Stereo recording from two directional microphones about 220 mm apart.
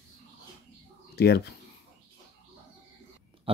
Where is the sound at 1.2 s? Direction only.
45° left (ahead or behind).